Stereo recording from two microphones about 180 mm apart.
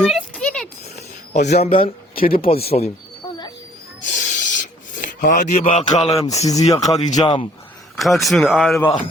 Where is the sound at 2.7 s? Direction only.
40° left (ahead or behind).